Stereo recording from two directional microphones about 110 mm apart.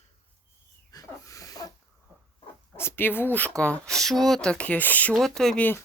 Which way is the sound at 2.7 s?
20° left (ahead or behind).